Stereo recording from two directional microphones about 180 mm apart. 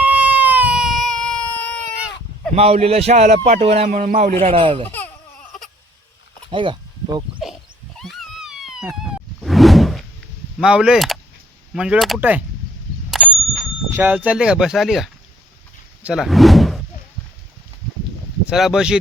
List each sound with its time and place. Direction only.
0.0 s baby cry: 10° right (ahead or behind); by 1.8 s 5° left (ahead or behind)
2.6 s speech: 35° right (ahead or behind)
4.9 s a sound: 10° left (ahead or behind)
6.5 s a sound: 30° right (ahead or behind)
7.9 s a sound: centre (ahead or behind)
9.4 s whoosh: centre (ahead or behind)
10.6 s speech: 5° right (ahead or behind)
13.1 s bicycle bell: centre (ahead or behind)
13.9 s speech: 10° right (ahead or behind)
18.4 s speech: 5° right (ahead or behind)